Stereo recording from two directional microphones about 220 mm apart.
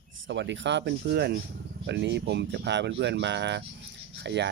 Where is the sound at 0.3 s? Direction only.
55° right (ahead or behind).